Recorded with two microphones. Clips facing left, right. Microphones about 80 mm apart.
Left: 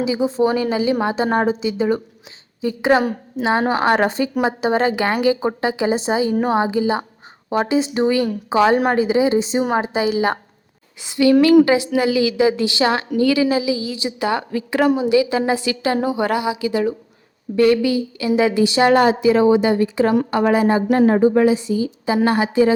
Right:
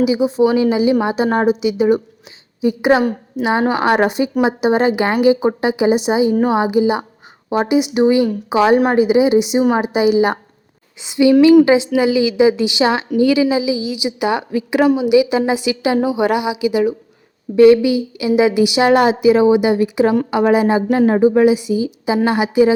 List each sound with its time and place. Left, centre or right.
0.0 s a woman's voice: centre